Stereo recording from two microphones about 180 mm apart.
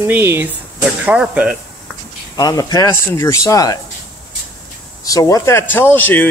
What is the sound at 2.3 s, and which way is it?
Speech, 20° left (ahead or behind).